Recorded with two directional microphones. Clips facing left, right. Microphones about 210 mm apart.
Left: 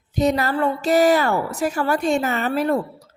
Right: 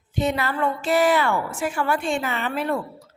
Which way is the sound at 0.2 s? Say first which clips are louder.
Left 4 dB; 40° left (ahead or behind).